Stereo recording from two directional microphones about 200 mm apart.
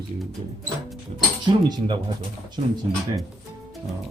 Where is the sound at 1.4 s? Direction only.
20° right (ahead or behind).